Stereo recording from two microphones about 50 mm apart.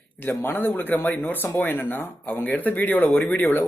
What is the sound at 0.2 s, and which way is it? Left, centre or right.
Speech, left.